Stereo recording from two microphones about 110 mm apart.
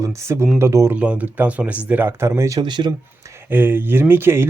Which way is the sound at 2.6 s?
45° right (ahead or behind).